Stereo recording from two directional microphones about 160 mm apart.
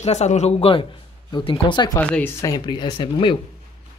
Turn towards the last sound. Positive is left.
turn(degrees=30)  # may be behind; listen again after turning